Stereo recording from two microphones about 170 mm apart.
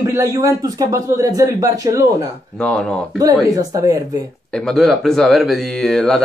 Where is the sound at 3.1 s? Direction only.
20° right (ahead or behind).